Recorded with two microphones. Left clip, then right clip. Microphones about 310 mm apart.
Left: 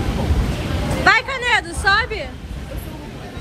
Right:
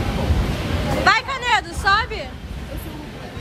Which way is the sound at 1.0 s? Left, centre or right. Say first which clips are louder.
Left 2 dB; centre.